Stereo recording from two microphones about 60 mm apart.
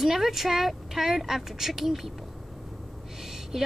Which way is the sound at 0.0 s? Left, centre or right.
Centre.